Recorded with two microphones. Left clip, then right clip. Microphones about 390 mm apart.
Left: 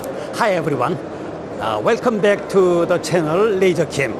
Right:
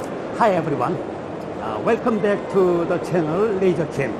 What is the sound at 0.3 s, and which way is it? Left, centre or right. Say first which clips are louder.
Speech: left 1 dB; centre.